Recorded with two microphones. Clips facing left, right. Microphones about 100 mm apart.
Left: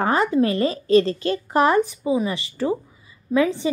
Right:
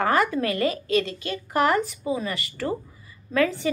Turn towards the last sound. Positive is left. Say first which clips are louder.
# left 3 dB
turn(degrees=20)  # may be behind; listen again after turning